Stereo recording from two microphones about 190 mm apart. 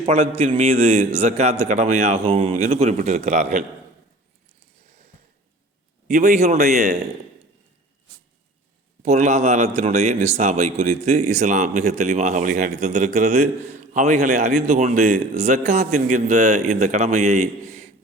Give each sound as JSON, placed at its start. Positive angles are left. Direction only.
{"t": 0.0, "sound": "a man's voice", "side_deg": -30}
{"t": 6.1, "sound": "a man's voice", "side_deg": -40}
{"t": 9.0, "sound": "a man's voice", "side_deg": -35}